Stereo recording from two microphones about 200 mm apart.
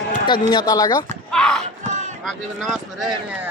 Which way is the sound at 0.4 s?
20° left (ahead or behind).